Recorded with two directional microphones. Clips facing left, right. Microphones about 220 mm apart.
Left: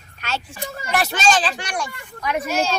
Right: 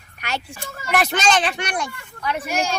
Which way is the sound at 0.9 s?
20° right (ahead or behind).